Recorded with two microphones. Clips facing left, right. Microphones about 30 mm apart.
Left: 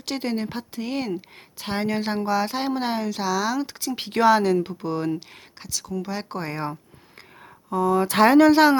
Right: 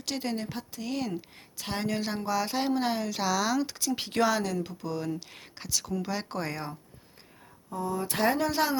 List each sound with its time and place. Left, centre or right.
0.0 s speech: left
3.1 s speech: centre
3.7 s speech: centre; by 5.2 s left
5.3 s speech: centre
7.7 s speech: left